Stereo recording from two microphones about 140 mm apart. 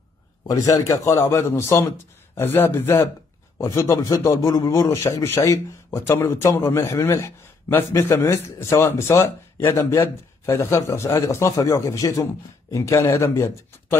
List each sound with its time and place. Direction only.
0.5 s a man's voice: 25° left (ahead or behind)